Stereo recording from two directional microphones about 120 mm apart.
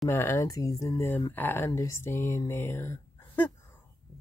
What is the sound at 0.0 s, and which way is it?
Speech, 20° left (ahead or behind).